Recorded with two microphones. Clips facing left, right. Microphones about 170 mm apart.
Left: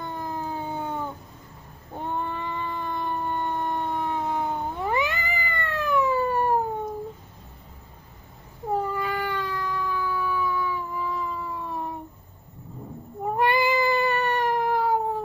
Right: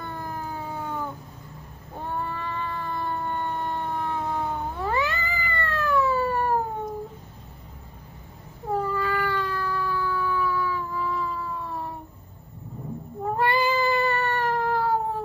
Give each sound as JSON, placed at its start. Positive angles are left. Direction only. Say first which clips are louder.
{"t": 0.0, "sound": "a sound", "louder": "left 2 dB", "side_deg": 20}
{"t": 2.0, "sound": "cat", "louder": "left 1 dB", "side_deg": 20}
{"t": 8.9, "sound": "cat", "louder": "right 2 dB", "side_deg": 15}
{"t": 13.2, "sound": "cat", "louder": "left 1 dB", "side_deg": 15}